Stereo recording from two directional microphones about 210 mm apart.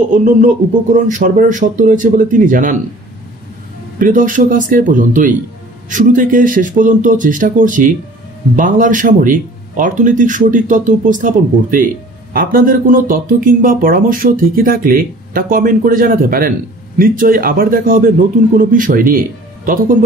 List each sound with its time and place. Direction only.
0.1 s speech: 40° right (ahead or behind)
4.0 s a man's voice: 40° right (ahead or behind)